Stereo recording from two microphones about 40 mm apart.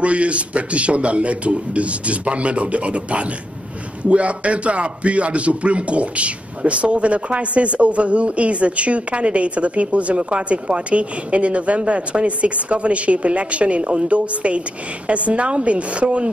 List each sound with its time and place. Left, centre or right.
0.0 s a man's voice: right